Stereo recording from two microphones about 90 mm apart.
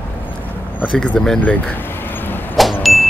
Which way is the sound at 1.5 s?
20° left (ahead or behind).